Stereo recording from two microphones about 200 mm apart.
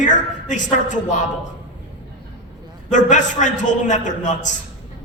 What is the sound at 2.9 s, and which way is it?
A man's voice, 40° left (ahead or behind).